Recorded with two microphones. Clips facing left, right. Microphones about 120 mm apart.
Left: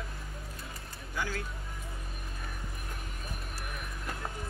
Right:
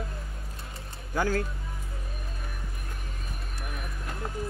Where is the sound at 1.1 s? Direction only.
50° right (ahead or behind).